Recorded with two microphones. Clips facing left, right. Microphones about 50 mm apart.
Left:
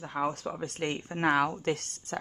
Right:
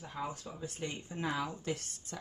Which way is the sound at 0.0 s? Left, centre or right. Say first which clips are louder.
Left 9 dB; left.